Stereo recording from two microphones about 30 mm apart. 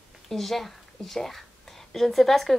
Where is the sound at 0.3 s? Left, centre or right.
Centre.